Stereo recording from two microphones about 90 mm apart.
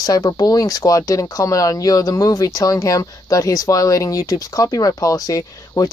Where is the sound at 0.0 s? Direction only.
45° left (ahead or behind).